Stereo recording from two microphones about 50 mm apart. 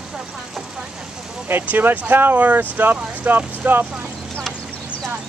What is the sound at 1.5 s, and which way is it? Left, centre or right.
Speech, right.